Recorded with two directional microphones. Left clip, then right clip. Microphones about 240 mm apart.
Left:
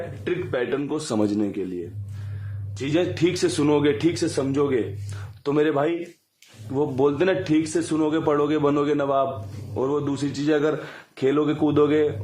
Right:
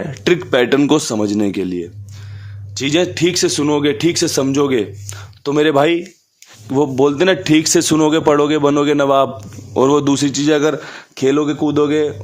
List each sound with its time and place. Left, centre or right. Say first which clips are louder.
0.1 s a man's voice: right 14 dB; right
0.9 s a man's voice: right 7 dB; right
2.7 s a man's voice: right 8 dB; right
5.4 s a man's voice: right 8 dB; right